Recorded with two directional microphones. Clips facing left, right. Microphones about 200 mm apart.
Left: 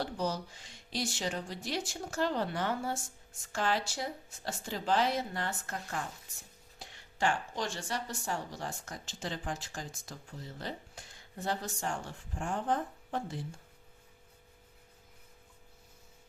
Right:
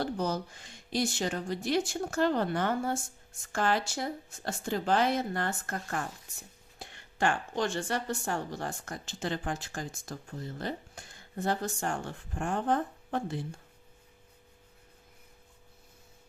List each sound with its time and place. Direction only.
0.0 s a woman's voice: 55° right (ahead or behind)